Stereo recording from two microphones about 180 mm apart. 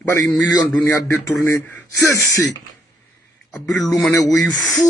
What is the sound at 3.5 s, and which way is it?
A man's voice, centre (ahead or behind).